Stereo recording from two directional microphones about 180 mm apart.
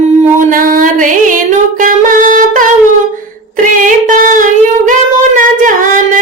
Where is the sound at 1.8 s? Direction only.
50° right (ahead or behind).